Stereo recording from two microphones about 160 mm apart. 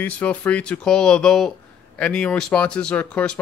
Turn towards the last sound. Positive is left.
turn(degrees=5)  # may be behind; listen again after turning